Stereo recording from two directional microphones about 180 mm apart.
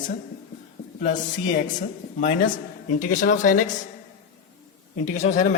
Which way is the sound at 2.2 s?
45° left (ahead or behind).